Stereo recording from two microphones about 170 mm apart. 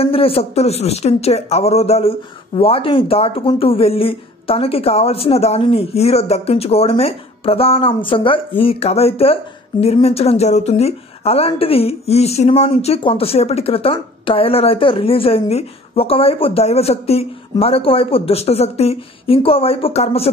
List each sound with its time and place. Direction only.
0.0 s speech: 35° left (ahead or behind)